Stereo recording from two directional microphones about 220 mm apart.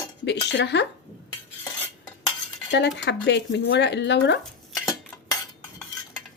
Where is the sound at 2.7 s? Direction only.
50° left (ahead or behind).